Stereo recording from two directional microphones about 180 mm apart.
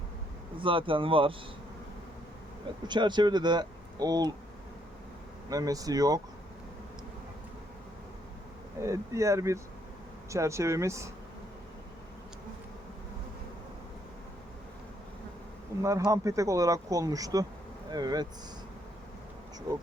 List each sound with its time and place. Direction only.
0.6 s speech: 30° right (ahead or behind)
2.8 s speech: 25° right (ahead or behind)
5.5 s speech: 20° right (ahead or behind)
8.8 s speech: 15° right (ahead or behind)
15.8 s speech: 20° right (ahead or behind)